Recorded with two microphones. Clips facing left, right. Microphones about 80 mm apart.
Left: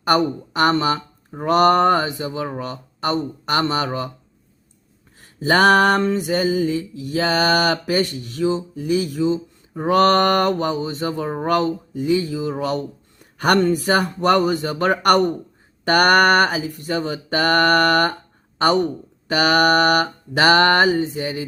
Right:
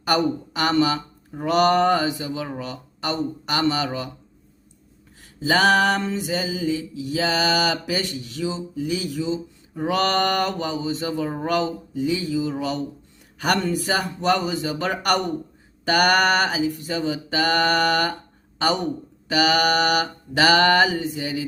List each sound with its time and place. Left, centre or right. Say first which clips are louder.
0.0 s speech: left 3 dB; left
5.4 s mantra: left 4 dB; left
18.6 s speech: left 5 dB; left
19.3 s mantra: left 3 dB; left
21.2 s speech: left 2 dB; left